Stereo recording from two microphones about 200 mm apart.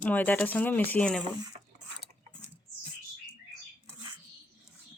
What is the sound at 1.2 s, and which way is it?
Speech, 20° right (ahead or behind).